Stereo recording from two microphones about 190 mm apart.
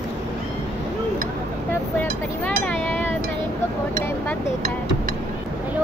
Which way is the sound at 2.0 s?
10° left (ahead or behind).